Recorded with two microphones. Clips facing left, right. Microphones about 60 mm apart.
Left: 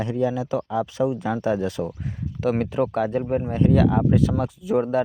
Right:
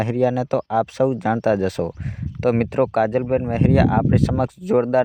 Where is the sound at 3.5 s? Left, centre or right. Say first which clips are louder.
Right 1 dB; right.